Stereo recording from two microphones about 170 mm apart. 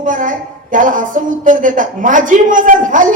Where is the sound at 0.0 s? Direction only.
50° right (ahead or behind).